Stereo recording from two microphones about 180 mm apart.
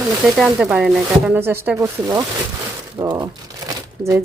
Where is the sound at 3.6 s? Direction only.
15° right (ahead or behind).